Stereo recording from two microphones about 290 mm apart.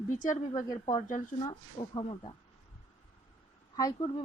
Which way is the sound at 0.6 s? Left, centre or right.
Left.